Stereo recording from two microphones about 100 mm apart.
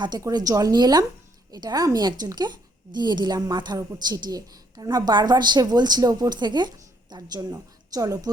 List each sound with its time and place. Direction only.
0.2 s a woman's voice: 35° right (ahead or behind)